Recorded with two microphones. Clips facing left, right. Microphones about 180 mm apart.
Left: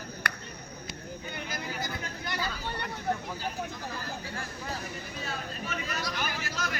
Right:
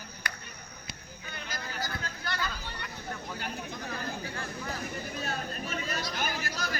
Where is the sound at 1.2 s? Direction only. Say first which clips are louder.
Left 2 dB; 20° left (ahead or behind).